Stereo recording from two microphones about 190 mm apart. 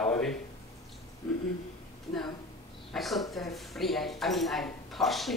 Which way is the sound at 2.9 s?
Centre (ahead or behind).